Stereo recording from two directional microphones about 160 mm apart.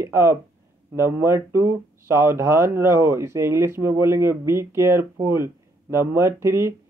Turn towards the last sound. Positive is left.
turn(degrees=-15)  # may be behind; listen again after turning